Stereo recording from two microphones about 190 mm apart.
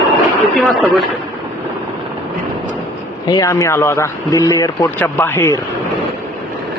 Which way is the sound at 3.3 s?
20° left (ahead or behind).